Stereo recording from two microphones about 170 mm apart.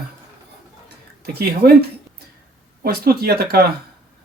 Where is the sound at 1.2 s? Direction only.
65° right (ahead or behind).